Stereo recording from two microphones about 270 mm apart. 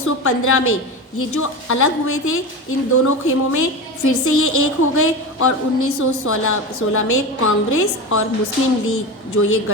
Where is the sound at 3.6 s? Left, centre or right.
Left.